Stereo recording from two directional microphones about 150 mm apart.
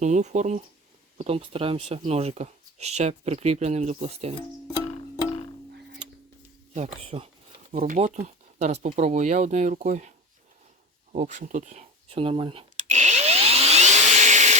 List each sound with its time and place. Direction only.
0.0 s speech: 50° right (ahead or behind)
1.2 s speech: 40° right (ahead or behind)
6.7 s speech: 45° right (ahead or behind)
11.1 s speech: 55° right (ahead or behind); by 12.6 s 35° right (ahead or behind)
12.7 s vacuum cleaner: 50° right (ahead or behind)